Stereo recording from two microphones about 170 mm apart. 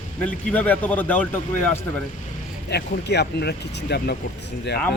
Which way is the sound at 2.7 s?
80° left.